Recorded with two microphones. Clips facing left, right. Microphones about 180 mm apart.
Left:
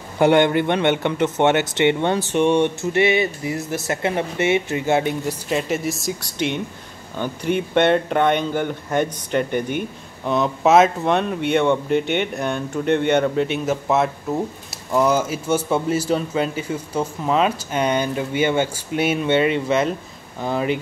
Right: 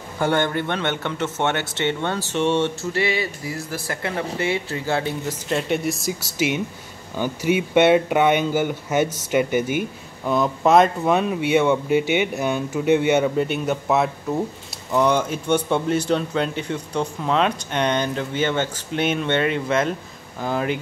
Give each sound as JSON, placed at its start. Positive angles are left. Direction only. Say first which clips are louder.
{"t": 0.2, "sound": "speech", "louder": "left 6 dB", "side_deg": 20}
{"t": 5.5, "sound": "speech", "louder": "right 1 dB", "side_deg": 0}